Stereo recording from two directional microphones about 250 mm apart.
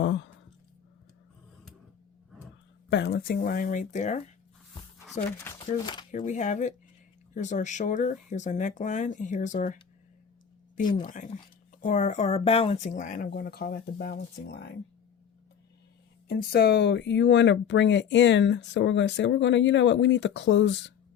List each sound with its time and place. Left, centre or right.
0.0 s a sound: left
2.9 s speech: left
5.4 s speech: centre
6.1 s speech: left
11.0 s speech: left
16.3 s speech: left